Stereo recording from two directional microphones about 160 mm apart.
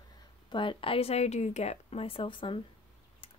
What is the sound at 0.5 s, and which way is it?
Speech, 30° left (ahead or behind).